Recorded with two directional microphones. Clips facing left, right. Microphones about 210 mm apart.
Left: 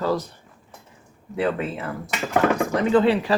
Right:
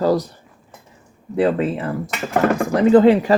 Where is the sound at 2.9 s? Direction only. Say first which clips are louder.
Right 7 dB; 45° right (ahead or behind).